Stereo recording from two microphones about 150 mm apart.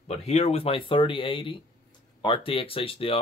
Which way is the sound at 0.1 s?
45° left (ahead or behind).